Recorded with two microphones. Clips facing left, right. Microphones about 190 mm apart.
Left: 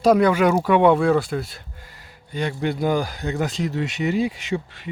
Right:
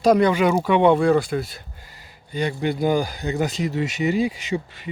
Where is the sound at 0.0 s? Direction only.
5° left (ahead or behind).